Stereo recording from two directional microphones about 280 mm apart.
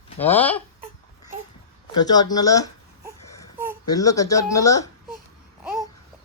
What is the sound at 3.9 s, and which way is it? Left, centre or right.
Speech, centre.